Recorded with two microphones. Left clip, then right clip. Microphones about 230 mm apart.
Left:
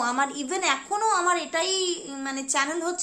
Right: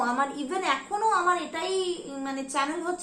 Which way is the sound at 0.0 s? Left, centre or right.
Left.